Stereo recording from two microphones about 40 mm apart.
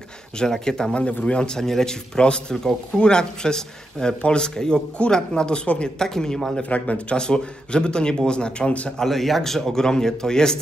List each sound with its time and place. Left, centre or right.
0.4 s a man's voice: centre
1.2 s a man's voice: left
2.1 s a man's voice: left
6.7 s speech: left
7.2 s speech: left
8.9 s a man's voice: centre